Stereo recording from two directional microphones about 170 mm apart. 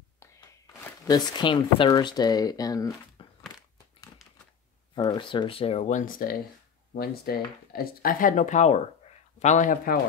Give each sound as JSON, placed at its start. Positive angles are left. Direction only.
{"t": 1.0, "sound": "speech", "side_deg": 25}
{"t": 3.2, "sound": "a sound", "side_deg": 30}
{"t": 4.9, "sound": "speech", "side_deg": 30}